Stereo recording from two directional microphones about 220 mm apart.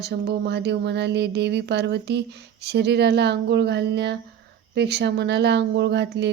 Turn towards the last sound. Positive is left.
turn(degrees=-50)  # may be behind; listen again after turning